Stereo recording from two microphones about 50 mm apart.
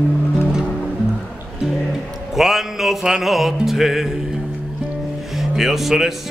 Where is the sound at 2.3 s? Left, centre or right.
Centre.